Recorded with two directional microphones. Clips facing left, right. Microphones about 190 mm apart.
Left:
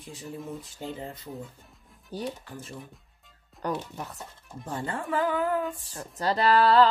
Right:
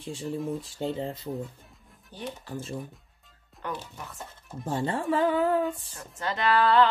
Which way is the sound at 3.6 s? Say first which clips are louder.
Left 5 dB; 40° left (ahead or behind).